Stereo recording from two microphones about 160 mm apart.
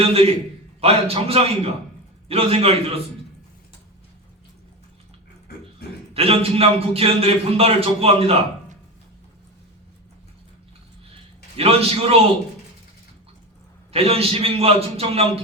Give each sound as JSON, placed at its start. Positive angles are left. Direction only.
{"t": 0.0, "sound": "a man's voice", "side_deg": -40}
{"t": 6.1, "sound": "a man's voice", "side_deg": -40}
{"t": 11.5, "sound": "a man's voice", "side_deg": -40}
{"t": 13.9, "sound": "a man's voice", "side_deg": -35}